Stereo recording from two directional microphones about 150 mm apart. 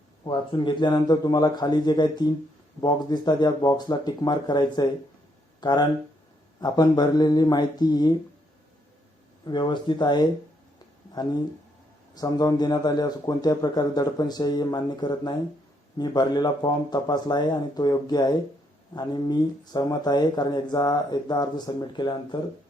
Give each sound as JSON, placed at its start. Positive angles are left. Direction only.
{"t": 0.3, "sound": "speech", "side_deg": 30}
{"t": 9.5, "sound": "speech", "side_deg": 30}